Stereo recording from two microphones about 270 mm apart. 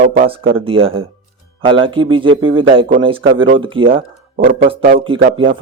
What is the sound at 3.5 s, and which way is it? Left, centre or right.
Speech, centre.